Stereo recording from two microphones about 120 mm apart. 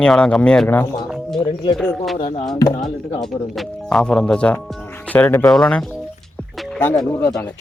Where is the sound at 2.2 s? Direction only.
35° left (ahead or behind).